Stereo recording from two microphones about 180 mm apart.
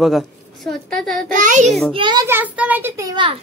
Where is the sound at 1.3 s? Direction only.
45° right (ahead or behind).